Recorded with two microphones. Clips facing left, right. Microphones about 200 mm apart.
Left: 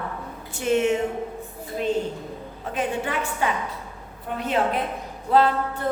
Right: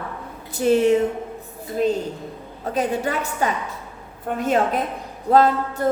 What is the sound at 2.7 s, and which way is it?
A woman's voice, 40° right (ahead or behind).